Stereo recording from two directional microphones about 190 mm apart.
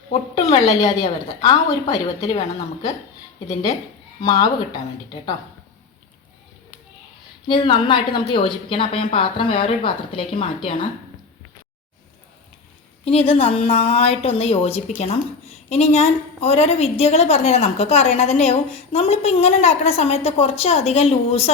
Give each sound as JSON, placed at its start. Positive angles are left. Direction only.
{"t": 0.4, "sound": "speech", "side_deg": 20}
{"t": 4.2, "sound": "speech", "side_deg": 20}
{"t": 7.4, "sound": "speech", "side_deg": 25}
{"t": 13.1, "sound": "a woman's voice", "side_deg": 30}